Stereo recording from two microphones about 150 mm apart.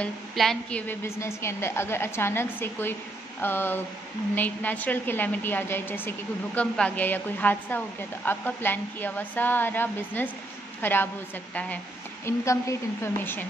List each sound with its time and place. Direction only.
0.0 s a woman's voice: 5° left (ahead or behind)
12.3 s a woman's voice: 20° left (ahead or behind)